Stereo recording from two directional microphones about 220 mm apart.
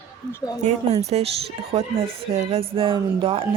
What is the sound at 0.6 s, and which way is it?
Speech, 30° right (ahead or behind).